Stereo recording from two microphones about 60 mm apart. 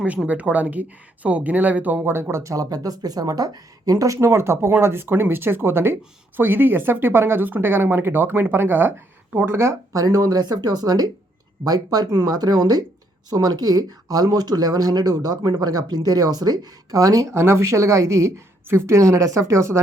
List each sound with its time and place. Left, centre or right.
0.3 s speech: right
2.4 s speech: right
9.5 s speech: right
9.9 s speech: right
17.3 s a woman's voice: right